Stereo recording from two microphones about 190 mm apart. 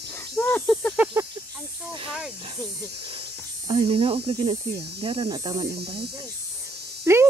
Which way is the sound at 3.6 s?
25° right (ahead or behind).